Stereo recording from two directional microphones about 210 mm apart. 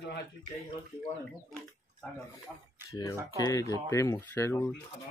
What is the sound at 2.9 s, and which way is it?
Speech, 20° left (ahead or behind).